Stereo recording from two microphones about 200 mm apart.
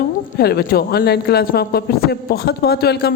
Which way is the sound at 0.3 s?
50° left (ahead or behind).